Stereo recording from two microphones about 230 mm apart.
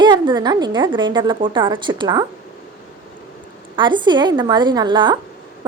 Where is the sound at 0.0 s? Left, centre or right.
Centre.